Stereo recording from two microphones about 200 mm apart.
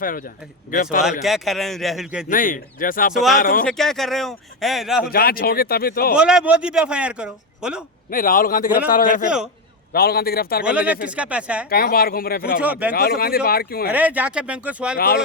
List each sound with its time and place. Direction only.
0.0 s speech: 45° left (ahead or behind)
1.2 s speech: centre (ahead or behind)
2.3 s speech: 45° left (ahead or behind)
3.7 s speech: centre (ahead or behind)
5.0 s speech: 50° left (ahead or behind)
6.1 s speech: 5° right (ahead or behind)
8.1 s a man's voice: 45° left (ahead or behind)
10.6 s speech: 5° right (ahead or behind)
11.7 s speech: 50° left (ahead or behind)
12.6 s speech: 5° right (ahead or behind)
12.9 s speech: 50° left (ahead or behind)
13.9 s speech: 10° right (ahead or behind)
14.9 s speech: 50° left (ahead or behind)